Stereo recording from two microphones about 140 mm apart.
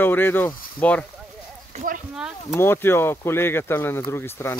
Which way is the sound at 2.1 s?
5° right (ahead or behind).